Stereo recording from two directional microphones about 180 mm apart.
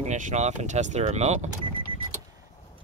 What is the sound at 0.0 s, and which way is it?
Speech, 40° right (ahead or behind).